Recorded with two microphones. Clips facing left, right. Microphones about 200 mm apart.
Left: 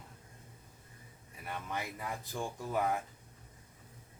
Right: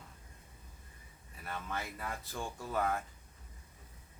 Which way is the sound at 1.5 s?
15° left (ahead or behind).